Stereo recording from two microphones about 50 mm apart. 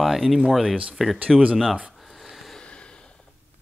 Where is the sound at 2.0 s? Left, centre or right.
Centre.